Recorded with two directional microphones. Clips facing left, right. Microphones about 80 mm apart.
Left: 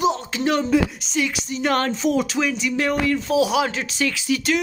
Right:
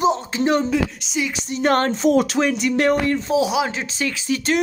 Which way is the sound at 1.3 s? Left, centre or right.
Right.